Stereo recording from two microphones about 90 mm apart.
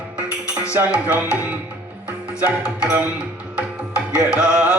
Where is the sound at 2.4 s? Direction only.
15° right (ahead or behind).